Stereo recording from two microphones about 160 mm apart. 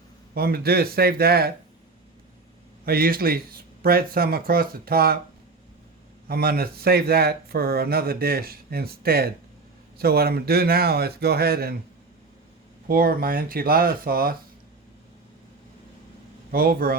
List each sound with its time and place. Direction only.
0.3 s speech: 75° right (ahead or behind)
2.8 s speech: 70° right (ahead or behind)
6.2 s speech: 70° right (ahead or behind)
12.9 s speech: 65° right (ahead or behind)
16.5 s speech: 65° right (ahead or behind)